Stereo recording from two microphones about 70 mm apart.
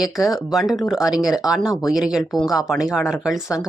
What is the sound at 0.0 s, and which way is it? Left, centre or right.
A woman's voice, centre.